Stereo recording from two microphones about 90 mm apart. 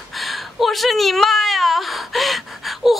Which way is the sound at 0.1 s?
Centre (ahead or behind).